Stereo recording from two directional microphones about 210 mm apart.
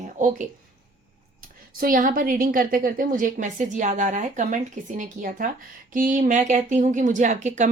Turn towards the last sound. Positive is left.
turn(degrees=-35)  # may be behind; listen again after turning